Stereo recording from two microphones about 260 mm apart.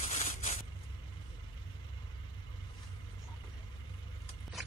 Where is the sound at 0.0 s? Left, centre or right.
Left.